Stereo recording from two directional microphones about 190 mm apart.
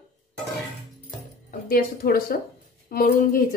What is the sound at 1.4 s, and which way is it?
A woman's voice, 50° left (ahead or behind).